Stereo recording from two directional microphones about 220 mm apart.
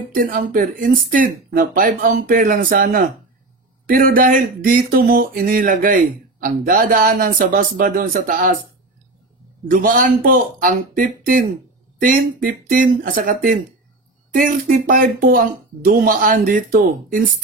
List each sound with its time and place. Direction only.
0.1 s speech: 40° right (ahead or behind)
9.7 s speech: 40° right (ahead or behind)